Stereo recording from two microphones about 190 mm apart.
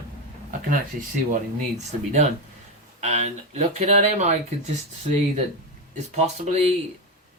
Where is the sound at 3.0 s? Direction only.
35° right (ahead or behind).